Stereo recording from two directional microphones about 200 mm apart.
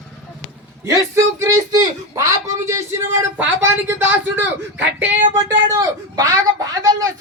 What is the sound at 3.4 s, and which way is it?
Speech, 10° right (ahead or behind).